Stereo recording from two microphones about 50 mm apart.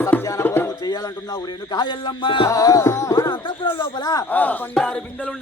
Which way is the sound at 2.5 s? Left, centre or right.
Left.